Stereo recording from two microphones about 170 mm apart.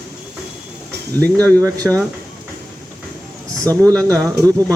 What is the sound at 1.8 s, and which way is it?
Speech, centre (ahead or behind).